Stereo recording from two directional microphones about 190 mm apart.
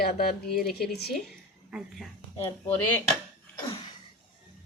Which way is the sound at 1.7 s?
5° right (ahead or behind).